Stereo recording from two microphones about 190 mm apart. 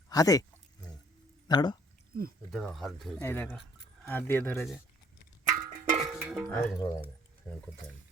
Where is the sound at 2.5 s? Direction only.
Centre (ahead or behind).